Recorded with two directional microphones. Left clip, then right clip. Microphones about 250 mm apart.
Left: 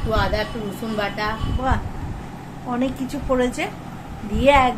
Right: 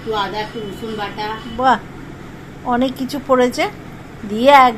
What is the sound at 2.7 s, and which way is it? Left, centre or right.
A woman's voice, right.